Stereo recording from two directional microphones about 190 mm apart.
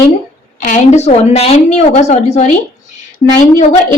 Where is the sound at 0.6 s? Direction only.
40° left (ahead or behind).